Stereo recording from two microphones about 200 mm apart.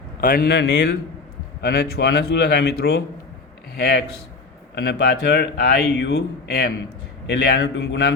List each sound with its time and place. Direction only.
0.2 s speech: 45° left (ahead or behind); by 8.1 s 60° left (ahead or behind)